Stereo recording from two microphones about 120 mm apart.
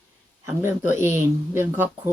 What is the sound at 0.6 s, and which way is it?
Speech, 20° right (ahead or behind).